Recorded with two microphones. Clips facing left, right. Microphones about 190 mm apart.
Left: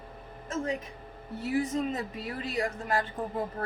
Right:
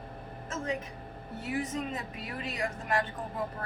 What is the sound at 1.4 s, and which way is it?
A woman's voice, 35° left (ahead or behind).